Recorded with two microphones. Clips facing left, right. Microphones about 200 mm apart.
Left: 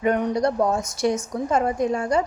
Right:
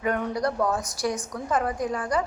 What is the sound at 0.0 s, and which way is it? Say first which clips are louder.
A woman's voice: left 5 dB; 20° left (ahead or behind).